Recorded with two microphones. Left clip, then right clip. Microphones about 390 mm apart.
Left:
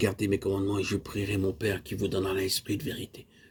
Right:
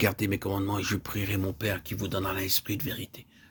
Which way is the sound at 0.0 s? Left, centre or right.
Right.